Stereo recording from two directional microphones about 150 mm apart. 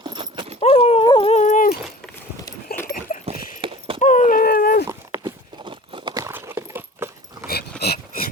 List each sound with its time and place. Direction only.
0.0 s dog: 30° right (ahead or behind)
0.6 s dog: 40° left (ahead or behind)
1.3 s dog: 50° left (ahead or behind)
2.7 s dog: 90° left
3.2 s clip-clop: 35° right (ahead or behind)
4.0 s a sound: 55° left (ahead or behind); by 4.9 s 75° left (ahead or behind)
4.9 s walk: 20° right (ahead or behind)
5.6 s a sound: 35° right (ahead or behind)
6.1 s clip-clop: 20° right (ahead or behind)
7.8 s a sound: 80° left